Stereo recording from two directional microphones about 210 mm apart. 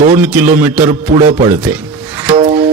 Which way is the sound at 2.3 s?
25° right (ahead or behind).